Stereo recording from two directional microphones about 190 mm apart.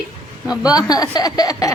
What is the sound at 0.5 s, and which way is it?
Speech, 20° left (ahead or behind).